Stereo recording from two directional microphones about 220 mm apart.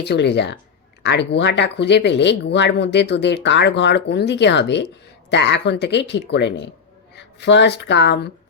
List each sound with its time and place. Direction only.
0.0 s speech: 50° left (ahead or behind)